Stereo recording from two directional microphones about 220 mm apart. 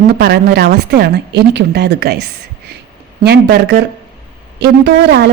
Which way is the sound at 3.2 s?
45° right (ahead or behind).